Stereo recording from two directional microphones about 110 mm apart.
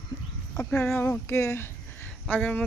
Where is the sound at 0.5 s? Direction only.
15° left (ahead or behind).